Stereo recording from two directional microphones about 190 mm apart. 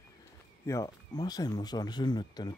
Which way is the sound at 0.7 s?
20° left (ahead or behind).